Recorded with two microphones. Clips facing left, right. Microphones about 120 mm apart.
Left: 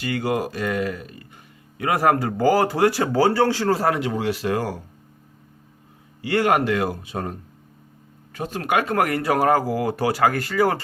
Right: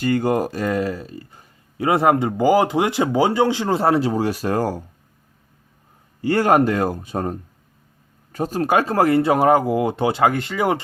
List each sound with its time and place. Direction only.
0.0 s speech: 45° right (ahead or behind)
6.2 s speech: 40° right (ahead or behind); by 10.8 s 20° right (ahead or behind)